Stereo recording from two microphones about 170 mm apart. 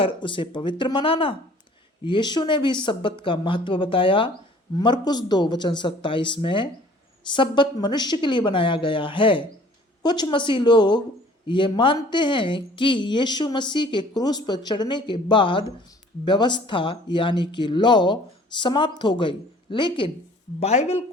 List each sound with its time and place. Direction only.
0.0 s a woman's voice: 30° left (ahead or behind)